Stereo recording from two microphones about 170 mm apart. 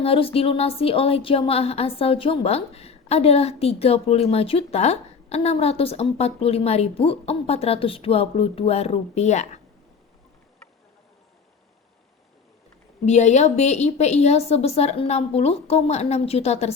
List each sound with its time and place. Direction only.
0.0 s speech: 35° left (ahead or behind)
13.1 s speech: 40° left (ahead or behind)